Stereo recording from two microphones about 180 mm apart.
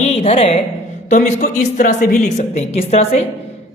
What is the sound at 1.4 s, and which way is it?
A woman's voice, 50° left (ahead or behind).